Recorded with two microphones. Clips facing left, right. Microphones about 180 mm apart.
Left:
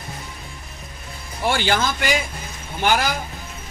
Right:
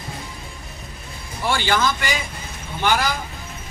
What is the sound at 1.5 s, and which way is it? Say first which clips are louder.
Speech: right 1 dB; 55° left (ahead or behind).